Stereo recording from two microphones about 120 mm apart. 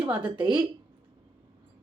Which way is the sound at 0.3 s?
10° right (ahead or behind).